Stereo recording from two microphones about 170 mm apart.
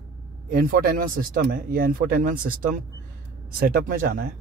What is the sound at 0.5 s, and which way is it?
Speech, 60° right (ahead or behind).